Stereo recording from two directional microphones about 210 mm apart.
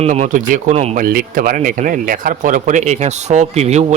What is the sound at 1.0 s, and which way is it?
Speech, 45° right (ahead or behind).